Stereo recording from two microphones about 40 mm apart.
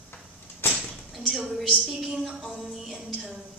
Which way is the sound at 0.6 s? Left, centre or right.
Left.